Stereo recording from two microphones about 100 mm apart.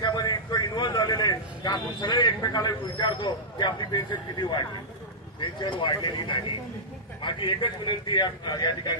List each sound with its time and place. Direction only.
0.0 s a man's voice: 45° left (ahead or behind)